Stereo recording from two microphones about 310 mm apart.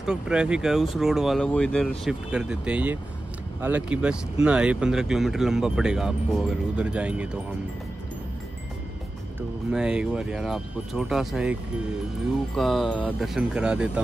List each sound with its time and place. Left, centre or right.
0.0 s speech: centre
9.7 s speech: centre
12.5 s speech: centre